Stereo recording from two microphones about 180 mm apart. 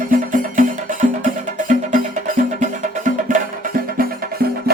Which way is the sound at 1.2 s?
45° right (ahead or behind).